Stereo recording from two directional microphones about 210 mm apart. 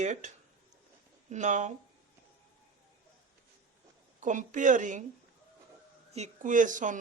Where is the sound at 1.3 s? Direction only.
35° right (ahead or behind).